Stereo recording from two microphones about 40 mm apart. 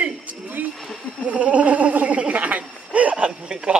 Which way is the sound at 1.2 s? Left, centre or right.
Right.